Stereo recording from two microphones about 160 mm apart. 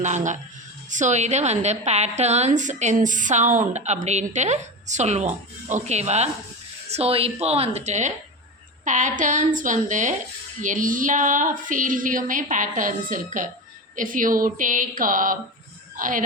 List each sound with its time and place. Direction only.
0.0 s a woman's voice: 50° right (ahead or behind)
10.6 s a sound: 55° right (ahead or behind)
16.0 s speech: 55° right (ahead or behind)